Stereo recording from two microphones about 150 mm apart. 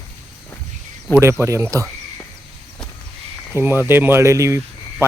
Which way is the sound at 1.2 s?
20° right (ahead or behind).